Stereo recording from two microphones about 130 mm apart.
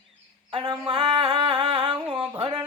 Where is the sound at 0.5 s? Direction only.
40° right (ahead or behind).